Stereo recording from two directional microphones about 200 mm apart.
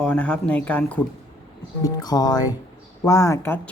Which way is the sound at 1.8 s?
20° left (ahead or behind).